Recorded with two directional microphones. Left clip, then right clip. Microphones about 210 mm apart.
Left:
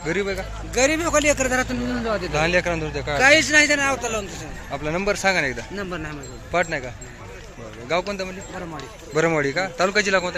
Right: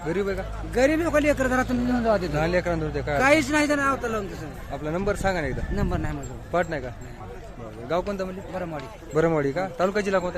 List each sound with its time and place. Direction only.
0.0 s speech: 5° right (ahead or behind)
0.7 s speech: 30° right (ahead or behind)
1.6 s a man's voice: 50° right (ahead or behind)
2.3 s speech: 5° right (ahead or behind)
3.2 s a man's voice: 50° right (ahead or behind)
4.7 s speech: centre (ahead or behind)
5.7 s speech: 55° right (ahead or behind)
6.5 s speech: 15° right (ahead or behind)
7.9 s speech: 15° right (ahead or behind)